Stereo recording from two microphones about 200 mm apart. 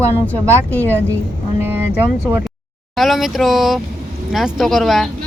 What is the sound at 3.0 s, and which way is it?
Speech, centre (ahead or behind).